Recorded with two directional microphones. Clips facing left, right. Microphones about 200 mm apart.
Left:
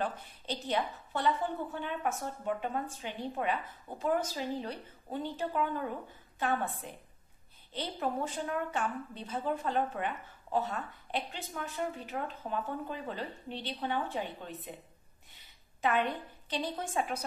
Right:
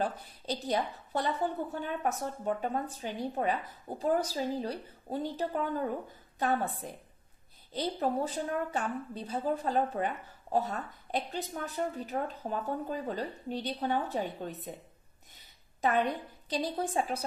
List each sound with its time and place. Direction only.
0.0 s a woman's voice: 35° right (ahead or behind)